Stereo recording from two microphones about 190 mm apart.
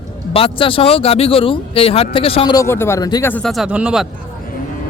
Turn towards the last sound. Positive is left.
turn(degrees=-5)  # may be behind; listen again after turning